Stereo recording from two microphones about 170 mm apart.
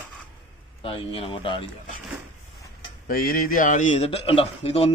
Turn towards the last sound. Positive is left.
turn(degrees=35)  # may be behind; listen again after turning